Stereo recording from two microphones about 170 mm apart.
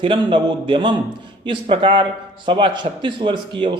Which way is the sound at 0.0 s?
30° right (ahead or behind).